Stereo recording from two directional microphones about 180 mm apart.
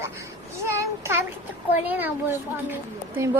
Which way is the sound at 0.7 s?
15° right (ahead or behind).